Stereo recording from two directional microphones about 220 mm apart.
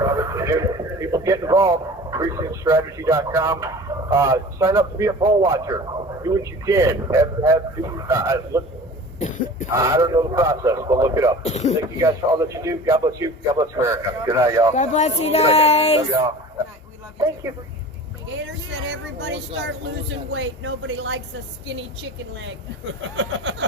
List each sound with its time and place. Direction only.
0.0 s a man's voice: 15° right (ahead or behind)
9.1 s cough: 35° left (ahead or behind)
9.7 s a man's voice: 15° right (ahead or behind)
11.4 s speech: 30° left (ahead or behind)
11.9 s a man's voice: 15° right (ahead or behind)
14.8 s speech: 30° left (ahead or behind)
16.0 s a man's voice: 15° right (ahead or behind)
18.9 s speech: 55° right (ahead or behind)
23.1 s speech: 60° right (ahead or behind)